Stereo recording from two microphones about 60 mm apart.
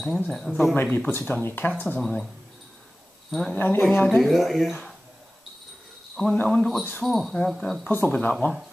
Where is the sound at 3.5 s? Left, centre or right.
Left.